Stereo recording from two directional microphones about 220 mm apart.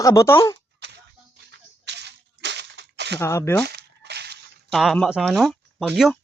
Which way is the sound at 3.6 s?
50° right (ahead or behind).